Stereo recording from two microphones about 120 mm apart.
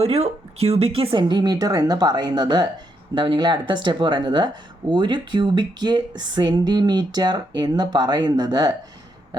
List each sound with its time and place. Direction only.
0.0 s speech: 55° right (ahead or behind); by 8.7 s 35° right (ahead or behind)